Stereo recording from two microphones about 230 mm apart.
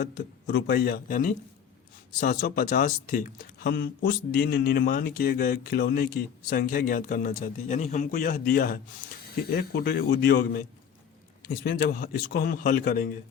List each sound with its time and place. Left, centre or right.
0.0 s a man's voice: left